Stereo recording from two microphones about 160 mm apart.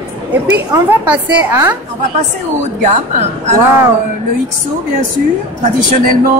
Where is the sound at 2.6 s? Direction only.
45° right (ahead or behind).